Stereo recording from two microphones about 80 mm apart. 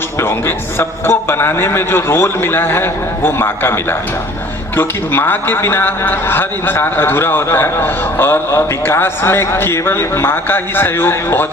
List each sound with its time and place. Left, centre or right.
0.2 s a man's voice: left